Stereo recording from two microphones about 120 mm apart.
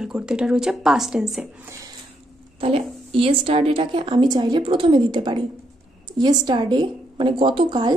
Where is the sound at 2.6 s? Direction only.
50° right (ahead or behind).